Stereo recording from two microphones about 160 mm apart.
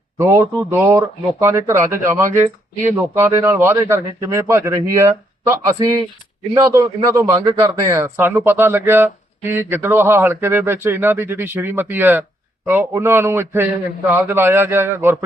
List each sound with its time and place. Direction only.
0.2 s a man's voice: 15° right (ahead or behind)